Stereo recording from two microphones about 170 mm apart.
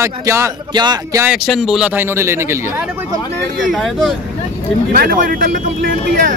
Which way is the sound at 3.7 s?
Centre (ahead or behind).